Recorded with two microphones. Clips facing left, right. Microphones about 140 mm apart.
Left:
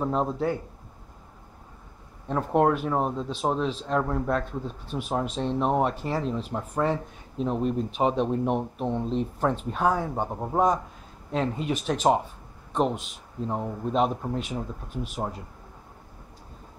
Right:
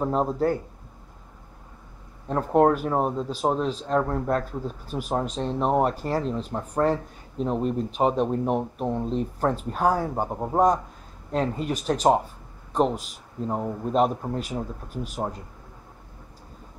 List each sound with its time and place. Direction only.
0.0 s speech: 5° right (ahead or behind)
2.2 s speech: 5° right (ahead or behind)
11.3 s speech: centre (ahead or behind)